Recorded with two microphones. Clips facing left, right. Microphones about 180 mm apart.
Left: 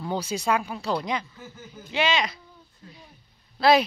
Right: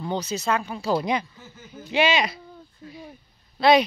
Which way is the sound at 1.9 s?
15° right (ahead or behind).